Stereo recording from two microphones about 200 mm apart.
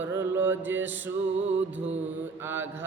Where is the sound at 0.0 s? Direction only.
10° right (ahead or behind).